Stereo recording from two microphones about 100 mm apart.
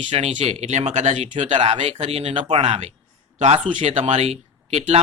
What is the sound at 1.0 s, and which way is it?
Speech, 60° right (ahead or behind).